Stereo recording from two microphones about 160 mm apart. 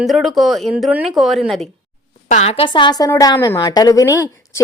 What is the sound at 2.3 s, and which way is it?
A woman's voice, 40° left (ahead or behind).